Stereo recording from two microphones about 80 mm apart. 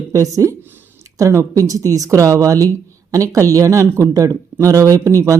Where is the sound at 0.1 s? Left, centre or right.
Right.